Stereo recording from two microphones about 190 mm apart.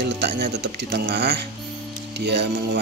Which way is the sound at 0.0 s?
60° right (ahead or behind).